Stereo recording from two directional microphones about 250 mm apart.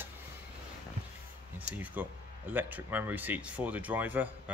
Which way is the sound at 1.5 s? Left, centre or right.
Centre.